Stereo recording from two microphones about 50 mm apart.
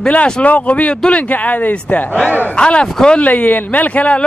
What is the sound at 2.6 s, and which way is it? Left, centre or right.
Speech, left.